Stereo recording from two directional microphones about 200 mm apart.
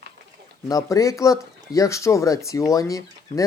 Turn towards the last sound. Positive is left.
turn(degrees=15)  # may be behind; listen again after turning